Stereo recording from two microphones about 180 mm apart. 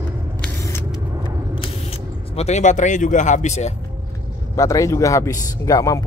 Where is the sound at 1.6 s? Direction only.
35° left (ahead or behind).